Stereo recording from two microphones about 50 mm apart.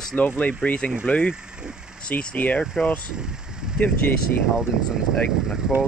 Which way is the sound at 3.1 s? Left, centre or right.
Centre.